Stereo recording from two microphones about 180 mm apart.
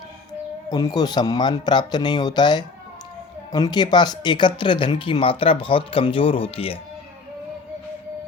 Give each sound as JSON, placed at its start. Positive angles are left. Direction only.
{"t": 0.7, "sound": "speech", "side_deg": 20}